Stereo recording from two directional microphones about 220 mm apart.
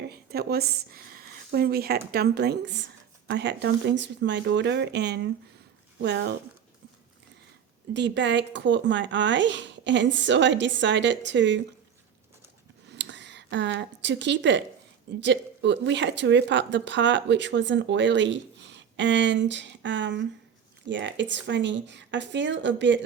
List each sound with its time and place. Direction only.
0.1 s a woman's voice: 45° right (ahead or behind)
7.9 s speech: 55° right (ahead or behind)
12.9 s a sound: 55° right (ahead or behind)
15.2 s speech: 55° right (ahead or behind)